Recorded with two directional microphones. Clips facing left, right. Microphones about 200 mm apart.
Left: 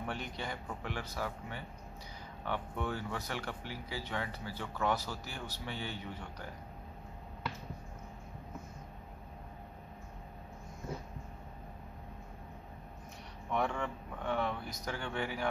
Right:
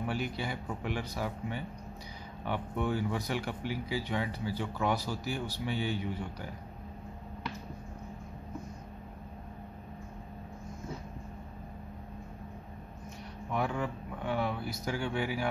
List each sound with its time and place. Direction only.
0.0 s speech: 5° right (ahead or behind)
13.5 s speech: 5° right (ahead or behind)